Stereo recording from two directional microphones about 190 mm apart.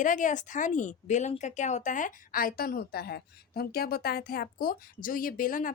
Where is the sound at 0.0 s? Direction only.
45° left (ahead or behind).